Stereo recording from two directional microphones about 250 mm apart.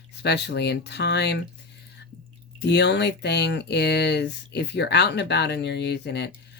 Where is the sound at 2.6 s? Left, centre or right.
Left.